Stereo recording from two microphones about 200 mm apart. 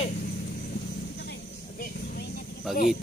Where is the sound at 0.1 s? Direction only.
50° left (ahead or behind).